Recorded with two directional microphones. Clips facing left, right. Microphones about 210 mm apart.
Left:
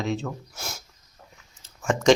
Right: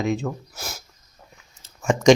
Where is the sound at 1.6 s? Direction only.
15° right (ahead or behind).